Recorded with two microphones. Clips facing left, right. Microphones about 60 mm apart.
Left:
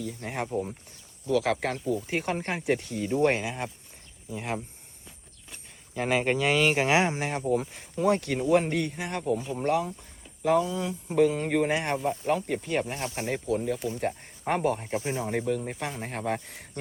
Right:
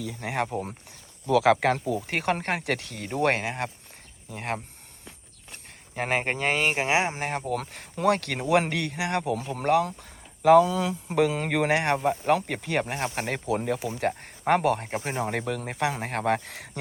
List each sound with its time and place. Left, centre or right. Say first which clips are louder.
0.1 s speech: right 4 dB; right
0.4 s speech: left 1 dB; right
1.6 s speech: right 7 dB; right
2.0 s speech: right 2 dB; right
5.9 s speech: left 1 dB; right
7.2 s speech: right 1 dB; right
7.5 s speech: left 3 dB; right
12.8 s speech: right 3 dB; right
14.8 s speech: right 1 dB; right